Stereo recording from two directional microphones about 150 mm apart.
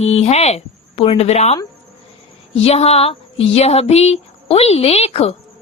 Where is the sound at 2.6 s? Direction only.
45° left (ahead or behind).